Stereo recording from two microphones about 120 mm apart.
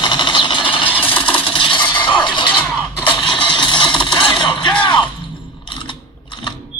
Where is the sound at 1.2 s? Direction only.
45° left (ahead or behind).